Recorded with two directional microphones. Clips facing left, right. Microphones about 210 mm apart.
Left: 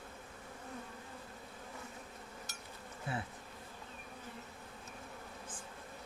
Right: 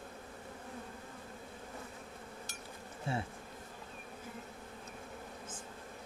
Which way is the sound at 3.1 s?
25° right (ahead or behind).